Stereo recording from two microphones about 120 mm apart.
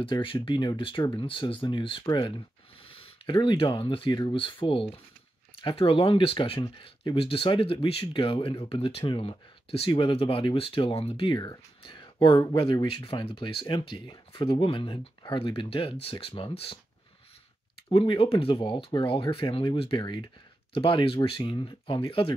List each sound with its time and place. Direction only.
0.0 s speech: 45° left (ahead or behind)
17.9 s speech: 45° left (ahead or behind)